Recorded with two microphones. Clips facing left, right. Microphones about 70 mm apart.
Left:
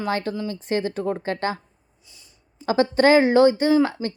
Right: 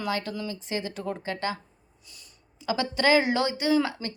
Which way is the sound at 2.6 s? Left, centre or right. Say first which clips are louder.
Left 8 dB; left.